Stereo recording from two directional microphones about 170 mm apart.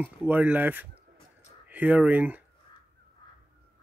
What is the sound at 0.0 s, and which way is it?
Speech, 10° right (ahead or behind).